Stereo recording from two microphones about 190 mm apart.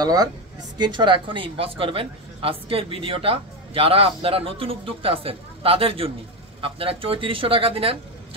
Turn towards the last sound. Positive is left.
turn(degrees=-30)  # may be behind; listen again after turning